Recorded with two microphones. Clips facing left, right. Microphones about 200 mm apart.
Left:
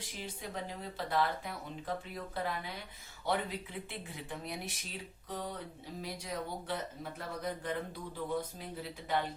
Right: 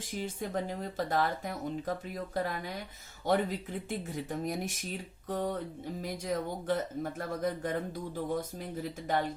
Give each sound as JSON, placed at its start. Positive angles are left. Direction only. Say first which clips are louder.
{"t": 0.0, "sound": "speech", "louder": "right 7 dB", "side_deg": -50}